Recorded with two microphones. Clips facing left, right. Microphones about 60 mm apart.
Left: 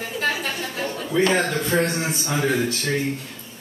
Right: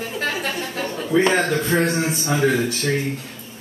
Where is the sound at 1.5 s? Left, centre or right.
Centre.